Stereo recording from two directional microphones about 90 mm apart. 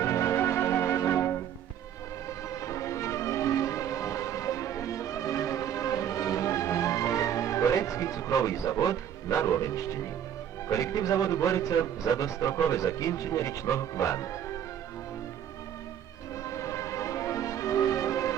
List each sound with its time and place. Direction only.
0.0 s music: 30° left (ahead or behind)
2.5 s music: 35° left (ahead or behind)
10.7 s a man's voice: 35° left (ahead or behind)
16.4 s music: 35° left (ahead or behind)